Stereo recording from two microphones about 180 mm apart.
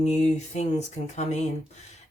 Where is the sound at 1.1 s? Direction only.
40° left (ahead or behind).